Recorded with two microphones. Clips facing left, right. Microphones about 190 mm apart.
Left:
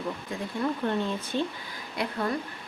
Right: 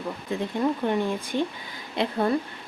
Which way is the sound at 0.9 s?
15° right (ahead or behind).